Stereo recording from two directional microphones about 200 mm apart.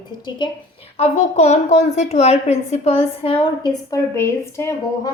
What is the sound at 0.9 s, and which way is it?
A woman's voice, 30° left (ahead or behind).